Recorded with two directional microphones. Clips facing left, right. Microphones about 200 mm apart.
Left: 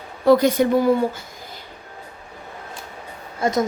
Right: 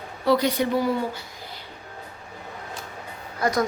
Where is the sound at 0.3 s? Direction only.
50° left (ahead or behind).